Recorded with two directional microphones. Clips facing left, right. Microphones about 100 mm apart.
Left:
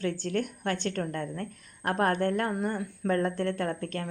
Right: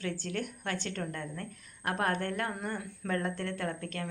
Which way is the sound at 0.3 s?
25° left (ahead or behind).